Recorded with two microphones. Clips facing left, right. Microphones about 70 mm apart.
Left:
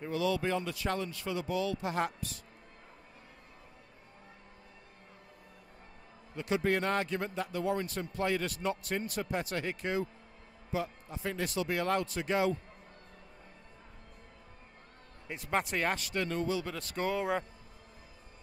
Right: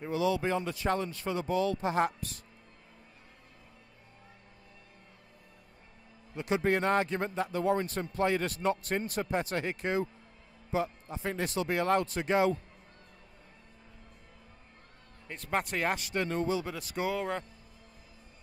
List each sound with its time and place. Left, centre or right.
0.0 s speech: centre; by 1.9 s right
1.9 s speech: right
6.3 s speech: right
15.2 s speech: centre
16.0 s speech: right
16.6 s speech: centre
17.1 s speech: centre